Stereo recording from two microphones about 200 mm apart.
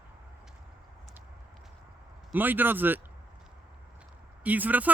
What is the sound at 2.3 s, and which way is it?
Speech, 10° right (ahead or behind).